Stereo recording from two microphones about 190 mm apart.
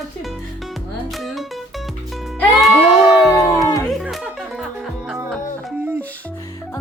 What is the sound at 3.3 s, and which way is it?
Music, 15° left (ahead or behind).